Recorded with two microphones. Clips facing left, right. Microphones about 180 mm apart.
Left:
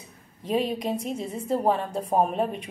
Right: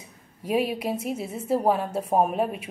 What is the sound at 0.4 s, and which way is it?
A woman's voice, 10° right (ahead or behind).